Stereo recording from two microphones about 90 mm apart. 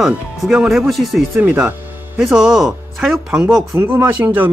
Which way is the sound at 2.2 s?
5° right (ahead or behind).